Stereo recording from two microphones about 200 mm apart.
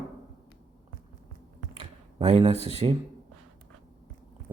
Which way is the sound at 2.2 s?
30° right (ahead or behind).